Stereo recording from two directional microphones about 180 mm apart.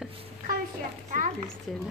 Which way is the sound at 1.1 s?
45° right (ahead or behind).